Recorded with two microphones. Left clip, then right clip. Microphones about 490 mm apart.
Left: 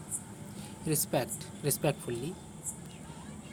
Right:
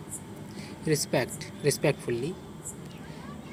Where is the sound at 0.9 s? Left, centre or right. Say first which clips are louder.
Right 5 dB; left.